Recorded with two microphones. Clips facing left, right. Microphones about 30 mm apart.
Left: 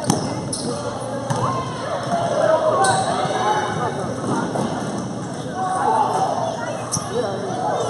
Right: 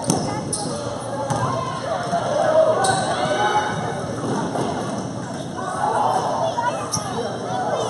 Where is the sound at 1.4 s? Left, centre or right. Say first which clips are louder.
Left 1 dB; centre.